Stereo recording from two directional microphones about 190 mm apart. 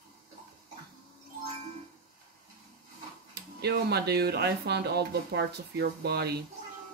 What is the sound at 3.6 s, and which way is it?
Speech, 60° right (ahead or behind).